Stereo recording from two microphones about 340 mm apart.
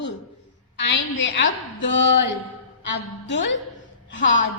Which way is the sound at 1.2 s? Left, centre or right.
Left.